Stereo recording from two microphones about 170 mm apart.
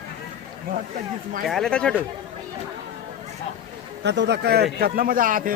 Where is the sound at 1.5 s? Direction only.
5° left (ahead or behind).